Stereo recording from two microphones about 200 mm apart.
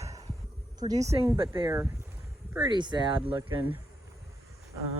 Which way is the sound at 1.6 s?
15° right (ahead or behind).